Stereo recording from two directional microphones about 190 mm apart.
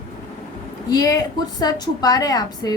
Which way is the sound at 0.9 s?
20° left (ahead or behind).